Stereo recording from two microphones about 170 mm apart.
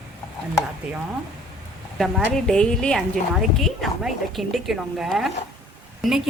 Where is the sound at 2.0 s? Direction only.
5° left (ahead or behind).